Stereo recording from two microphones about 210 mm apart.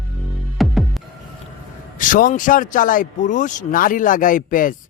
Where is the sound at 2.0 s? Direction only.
40° left (ahead or behind).